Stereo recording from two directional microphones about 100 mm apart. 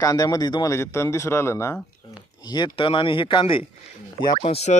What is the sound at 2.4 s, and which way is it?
Speech, 45° left (ahead or behind).